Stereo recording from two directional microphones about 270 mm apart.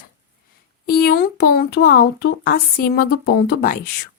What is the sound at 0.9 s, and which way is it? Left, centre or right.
Speech, left.